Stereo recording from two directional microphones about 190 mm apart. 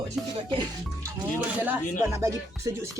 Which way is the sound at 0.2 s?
Centre (ahead or behind).